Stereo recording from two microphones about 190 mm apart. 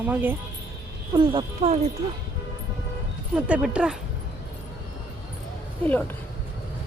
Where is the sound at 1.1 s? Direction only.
25° right (ahead or behind).